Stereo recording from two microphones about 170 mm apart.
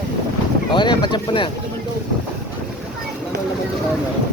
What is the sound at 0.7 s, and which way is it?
Speech, 25° left (ahead or behind).